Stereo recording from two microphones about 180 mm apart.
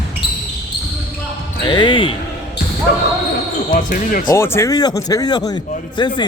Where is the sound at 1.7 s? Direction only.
30° left (ahead or behind).